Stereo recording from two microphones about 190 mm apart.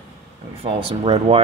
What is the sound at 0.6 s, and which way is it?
Speech, 30° right (ahead or behind).